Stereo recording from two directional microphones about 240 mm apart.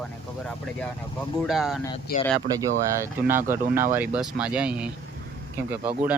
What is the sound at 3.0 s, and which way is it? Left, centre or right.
Speech, centre.